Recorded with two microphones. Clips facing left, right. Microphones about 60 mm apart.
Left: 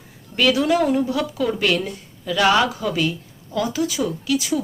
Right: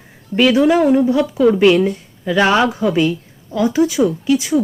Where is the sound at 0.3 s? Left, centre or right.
Right.